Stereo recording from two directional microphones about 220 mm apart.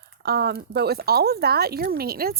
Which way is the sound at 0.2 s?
45° right (ahead or behind).